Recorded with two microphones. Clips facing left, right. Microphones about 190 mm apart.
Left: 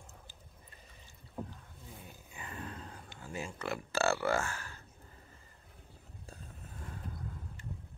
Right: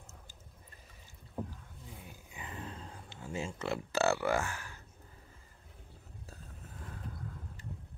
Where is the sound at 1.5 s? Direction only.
5° right (ahead or behind).